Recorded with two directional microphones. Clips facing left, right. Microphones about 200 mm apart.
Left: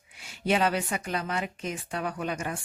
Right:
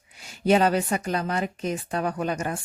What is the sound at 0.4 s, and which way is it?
Speech, 40° right (ahead or behind).